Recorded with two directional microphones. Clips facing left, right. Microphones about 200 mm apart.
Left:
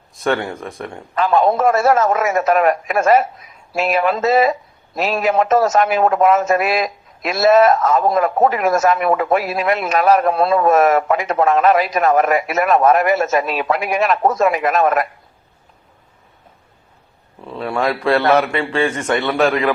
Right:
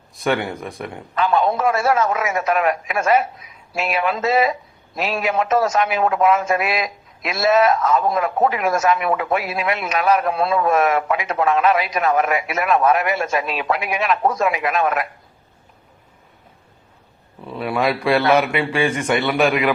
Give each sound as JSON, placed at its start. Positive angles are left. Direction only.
{"t": 0.3, "sound": "a man's voice", "side_deg": 0}
{"t": 1.2, "sound": "speech", "side_deg": 45}
{"t": 17.8, "sound": "a man's voice", "side_deg": -15}